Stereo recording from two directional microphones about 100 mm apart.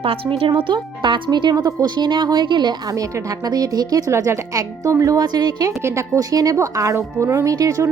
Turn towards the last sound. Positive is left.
turn(degrees=-35)  # may be behind; listen again after turning